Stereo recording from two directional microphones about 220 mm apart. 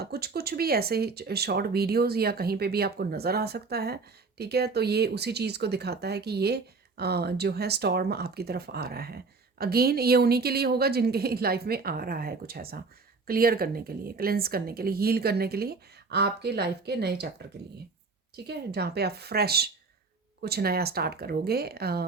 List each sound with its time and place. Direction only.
0.0 s speech: 45° right (ahead or behind)
18.4 s speech: 50° right (ahead or behind)